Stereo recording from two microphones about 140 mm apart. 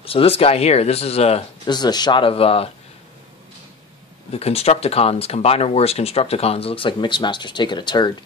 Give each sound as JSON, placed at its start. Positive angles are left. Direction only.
{"t": 0.0, "sound": "speech", "side_deg": 40}
{"t": 1.7, "sound": "speech", "side_deg": 30}
{"t": 4.3, "sound": "speech", "side_deg": 45}